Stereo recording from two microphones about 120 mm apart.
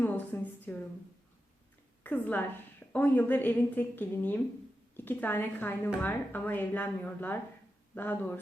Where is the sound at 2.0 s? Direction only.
15° left (ahead or behind).